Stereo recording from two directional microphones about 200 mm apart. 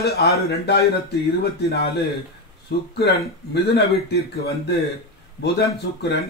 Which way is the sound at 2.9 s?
55° left (ahead or behind).